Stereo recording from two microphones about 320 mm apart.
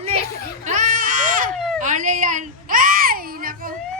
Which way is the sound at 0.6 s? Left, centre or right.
Right.